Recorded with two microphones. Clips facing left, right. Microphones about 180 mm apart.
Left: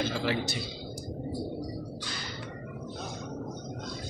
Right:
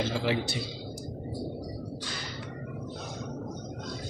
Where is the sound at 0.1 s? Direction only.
20° right (ahead or behind).